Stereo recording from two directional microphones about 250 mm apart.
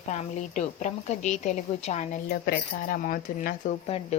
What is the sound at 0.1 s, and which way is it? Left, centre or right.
A woman's voice, left.